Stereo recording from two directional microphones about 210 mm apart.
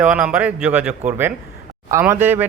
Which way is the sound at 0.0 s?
10° right (ahead or behind).